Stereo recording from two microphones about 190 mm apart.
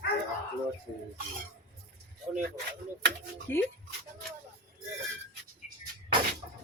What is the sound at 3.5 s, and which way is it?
Speech, 10° left (ahead or behind).